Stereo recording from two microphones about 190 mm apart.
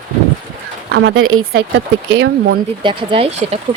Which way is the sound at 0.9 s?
65° right (ahead or behind).